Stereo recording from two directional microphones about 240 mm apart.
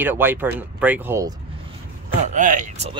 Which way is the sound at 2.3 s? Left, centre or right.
Right.